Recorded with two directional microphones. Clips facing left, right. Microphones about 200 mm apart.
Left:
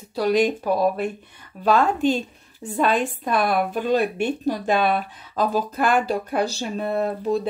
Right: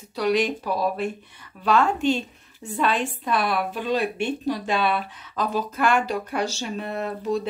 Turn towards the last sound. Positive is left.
turn(degrees=35)  # may be behind; listen again after turning